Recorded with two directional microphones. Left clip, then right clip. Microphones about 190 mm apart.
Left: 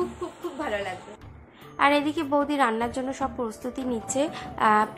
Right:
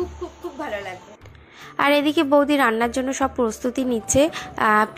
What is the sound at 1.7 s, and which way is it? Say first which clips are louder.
A woman's voice: right 4 dB; 25° right (ahead or behind).